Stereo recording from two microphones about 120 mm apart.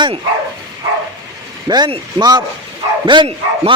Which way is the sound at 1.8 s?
40° right (ahead or behind).